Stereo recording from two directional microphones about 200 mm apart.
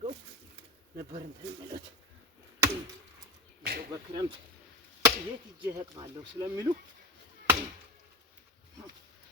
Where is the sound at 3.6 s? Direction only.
50° right (ahead or behind).